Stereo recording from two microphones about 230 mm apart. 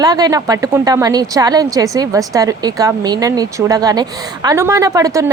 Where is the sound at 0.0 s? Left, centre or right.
Centre.